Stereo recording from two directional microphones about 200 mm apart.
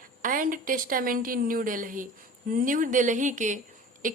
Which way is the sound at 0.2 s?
45° right (ahead or behind).